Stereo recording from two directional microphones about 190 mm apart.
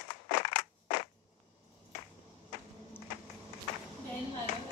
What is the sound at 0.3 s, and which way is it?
Crushing, 50° left (ahead or behind).